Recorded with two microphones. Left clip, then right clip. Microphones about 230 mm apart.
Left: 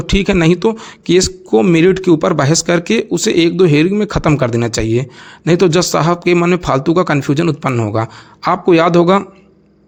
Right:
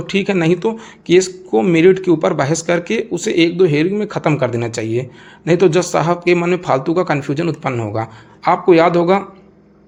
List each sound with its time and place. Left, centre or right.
0.0 s a man's voice: left